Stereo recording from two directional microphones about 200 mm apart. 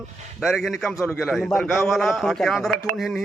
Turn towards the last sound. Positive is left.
turn(degrees=0)  # may be behind; listen again after turning